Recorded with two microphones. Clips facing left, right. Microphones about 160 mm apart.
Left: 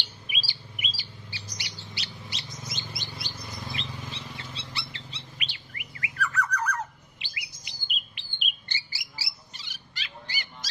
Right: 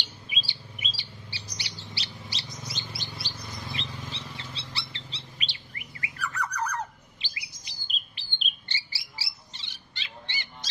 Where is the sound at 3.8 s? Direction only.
10° left (ahead or behind).